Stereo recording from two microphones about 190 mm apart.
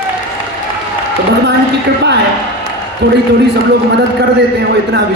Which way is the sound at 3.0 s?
65° right (ahead or behind).